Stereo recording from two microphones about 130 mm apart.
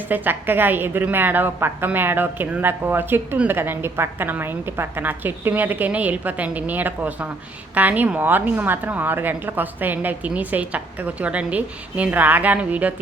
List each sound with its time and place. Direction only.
0.1 s a woman's voice: 15° right (ahead or behind)